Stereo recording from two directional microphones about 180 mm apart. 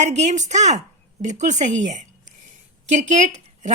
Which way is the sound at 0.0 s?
40° right (ahead or behind).